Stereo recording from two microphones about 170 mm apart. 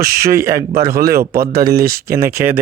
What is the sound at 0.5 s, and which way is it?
Speech, 65° right (ahead or behind).